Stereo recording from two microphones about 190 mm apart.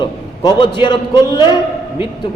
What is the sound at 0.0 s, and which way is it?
A man's voice, 25° left (ahead or behind).